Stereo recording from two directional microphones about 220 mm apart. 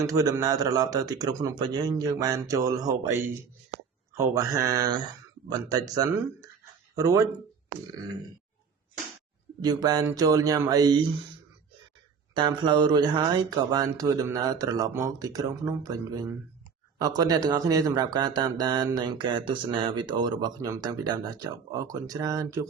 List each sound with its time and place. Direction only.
0.0 s speech: 15° right (ahead or behind)
9.6 s speech: 15° right (ahead or behind)
12.3 s speech: 20° right (ahead or behind)